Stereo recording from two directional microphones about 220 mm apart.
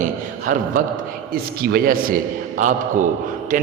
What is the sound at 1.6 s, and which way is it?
A man's voice, 40° right (ahead or behind).